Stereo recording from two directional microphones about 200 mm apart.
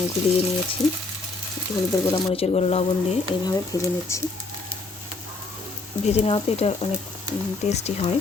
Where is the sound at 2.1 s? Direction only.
30° left (ahead or behind).